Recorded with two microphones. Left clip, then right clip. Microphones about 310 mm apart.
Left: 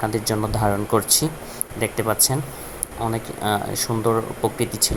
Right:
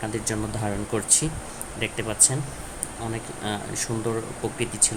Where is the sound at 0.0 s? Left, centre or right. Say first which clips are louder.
Left 6 dB; centre.